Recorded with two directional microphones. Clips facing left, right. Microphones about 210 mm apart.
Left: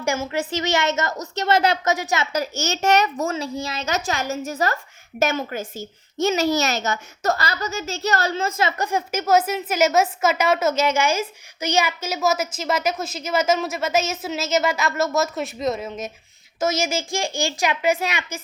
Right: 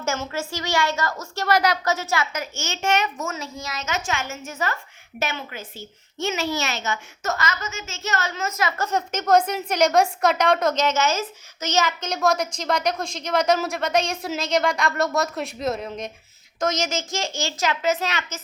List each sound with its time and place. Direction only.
0.0 s a woman's voice: 15° left (ahead or behind)
1.9 s a child's voice: 15° left (ahead or behind)
2.3 s a woman's voice: 40° left (ahead or behind)
8.8 s a woman's voice: 10° left (ahead or behind)